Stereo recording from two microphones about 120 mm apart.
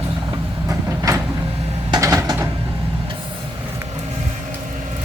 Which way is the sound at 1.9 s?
25° right (ahead or behind).